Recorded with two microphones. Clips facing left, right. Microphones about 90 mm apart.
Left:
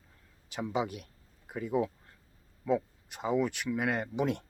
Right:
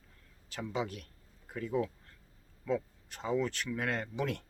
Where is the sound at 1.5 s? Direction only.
15° left (ahead or behind).